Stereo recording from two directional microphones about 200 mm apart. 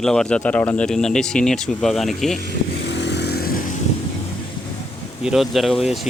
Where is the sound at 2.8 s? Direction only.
60° left (ahead or behind).